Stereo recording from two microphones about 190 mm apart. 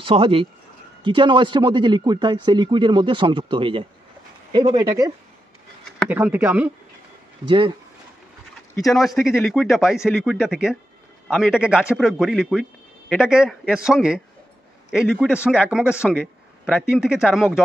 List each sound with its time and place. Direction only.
0.0 s speech: 30° right (ahead or behind); by 6.7 s 10° right (ahead or behind)
7.4 s speech: 25° right (ahead or behind)
8.8 s a man's voice: centre (ahead or behind)